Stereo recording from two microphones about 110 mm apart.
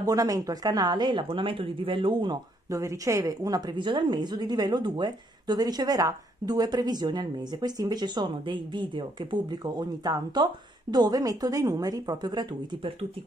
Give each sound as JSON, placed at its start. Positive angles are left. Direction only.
{"t": 0.0, "sound": "speech", "side_deg": -35}
{"t": 2.7, "sound": "a woman's voice", "side_deg": -30}